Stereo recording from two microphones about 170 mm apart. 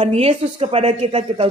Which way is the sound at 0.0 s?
35° right (ahead or behind).